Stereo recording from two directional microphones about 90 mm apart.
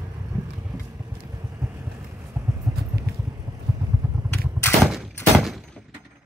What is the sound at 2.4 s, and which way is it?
Clip-clop, 20° right (ahead or behind).